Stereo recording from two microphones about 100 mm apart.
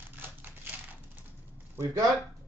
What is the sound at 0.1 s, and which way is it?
Typewriter, 20° right (ahead or behind).